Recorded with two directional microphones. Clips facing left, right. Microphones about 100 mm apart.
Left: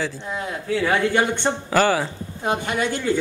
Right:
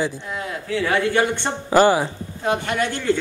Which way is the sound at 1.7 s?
20° right (ahead or behind).